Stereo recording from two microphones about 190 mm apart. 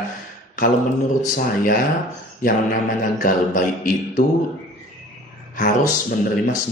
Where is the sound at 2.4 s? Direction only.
45° left (ahead or behind).